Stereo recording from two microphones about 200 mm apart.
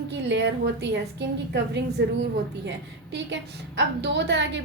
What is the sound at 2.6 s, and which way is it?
A woman's voice, 60° right (ahead or behind).